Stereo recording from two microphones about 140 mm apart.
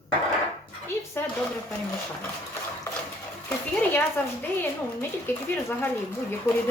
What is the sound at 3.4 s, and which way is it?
Speech, 15° left (ahead or behind).